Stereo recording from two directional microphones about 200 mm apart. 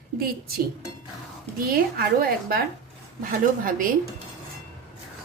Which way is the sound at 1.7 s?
45° right (ahead or behind).